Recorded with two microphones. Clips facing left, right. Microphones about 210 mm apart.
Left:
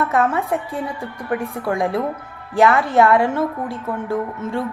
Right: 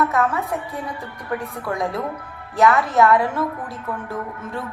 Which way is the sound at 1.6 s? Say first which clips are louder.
Left 5 dB; 30° left (ahead or behind).